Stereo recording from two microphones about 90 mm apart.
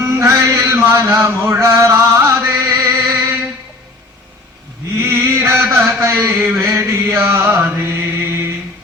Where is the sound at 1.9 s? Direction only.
30° right (ahead or behind).